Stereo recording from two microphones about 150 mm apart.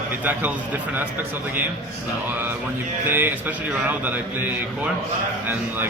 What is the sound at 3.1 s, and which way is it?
Speech, 15° right (ahead or behind).